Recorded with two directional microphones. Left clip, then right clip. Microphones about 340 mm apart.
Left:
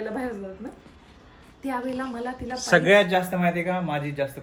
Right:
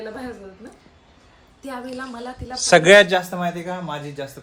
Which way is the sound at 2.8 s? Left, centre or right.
Right.